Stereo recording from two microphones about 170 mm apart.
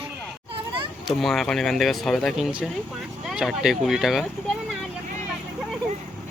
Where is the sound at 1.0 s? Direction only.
Centre (ahead or behind).